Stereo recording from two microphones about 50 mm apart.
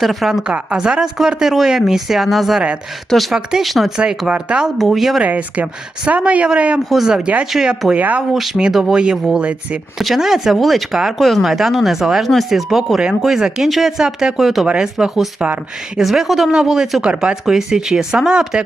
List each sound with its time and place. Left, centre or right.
0.0 s speech: centre
0.4 s speech: centre
3.9 s speech: centre
4.8 s speech: centre
5.2 s speech: right
6.7 s speech: centre
7.9 s speech: right
8.7 s speech: centre
10.0 s speech: centre
14.4 s speech: centre